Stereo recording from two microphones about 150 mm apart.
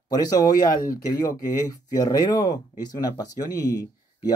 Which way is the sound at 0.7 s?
65° left (ahead or behind).